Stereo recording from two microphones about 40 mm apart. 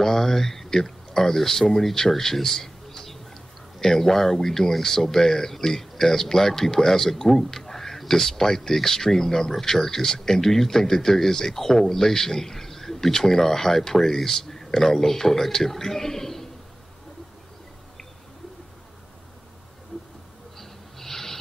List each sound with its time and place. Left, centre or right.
0.0 s speech: centre
20.5 s snort: centre